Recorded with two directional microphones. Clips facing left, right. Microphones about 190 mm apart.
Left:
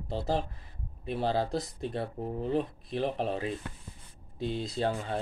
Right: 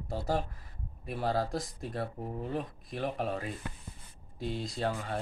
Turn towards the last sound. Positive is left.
turn(degrees=30)  # may be behind; listen again after turning